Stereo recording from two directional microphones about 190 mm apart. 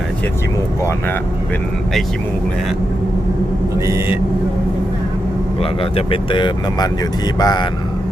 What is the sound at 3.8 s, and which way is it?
Speech, 15° right (ahead or behind).